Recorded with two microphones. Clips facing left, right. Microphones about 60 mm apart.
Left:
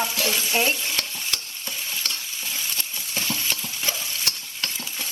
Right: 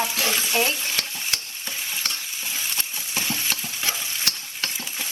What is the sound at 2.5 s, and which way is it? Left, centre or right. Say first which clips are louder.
Stir: right 1 dB; centre.